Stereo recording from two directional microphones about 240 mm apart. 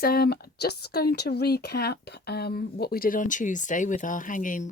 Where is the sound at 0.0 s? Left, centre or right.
Left.